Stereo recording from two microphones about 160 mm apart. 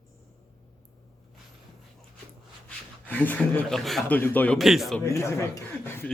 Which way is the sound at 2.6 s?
10° left (ahead or behind).